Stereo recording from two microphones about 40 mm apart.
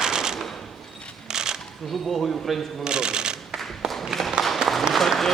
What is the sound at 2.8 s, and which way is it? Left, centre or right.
Speech, right.